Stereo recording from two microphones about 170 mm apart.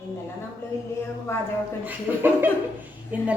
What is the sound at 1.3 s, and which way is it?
Speech, 15° left (ahead or behind).